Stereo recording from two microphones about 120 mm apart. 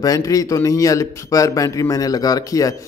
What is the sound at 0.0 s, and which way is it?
A man's voice, 30° left (ahead or behind).